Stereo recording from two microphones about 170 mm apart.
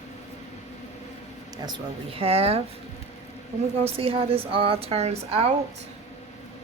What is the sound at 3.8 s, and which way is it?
A woman's voice, 35° right (ahead or behind).